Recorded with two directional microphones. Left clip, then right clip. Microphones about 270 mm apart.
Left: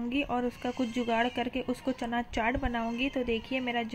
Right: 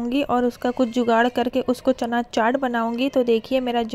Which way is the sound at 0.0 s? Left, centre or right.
Right.